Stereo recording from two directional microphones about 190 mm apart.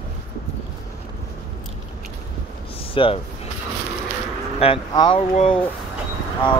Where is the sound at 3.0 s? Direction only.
25° left (ahead or behind).